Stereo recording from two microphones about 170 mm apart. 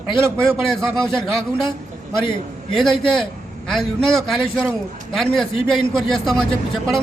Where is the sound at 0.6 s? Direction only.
5° left (ahead or behind).